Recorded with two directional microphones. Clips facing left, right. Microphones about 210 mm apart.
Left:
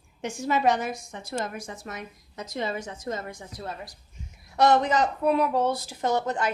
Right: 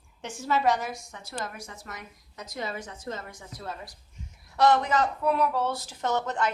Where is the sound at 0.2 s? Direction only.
15° left (ahead or behind).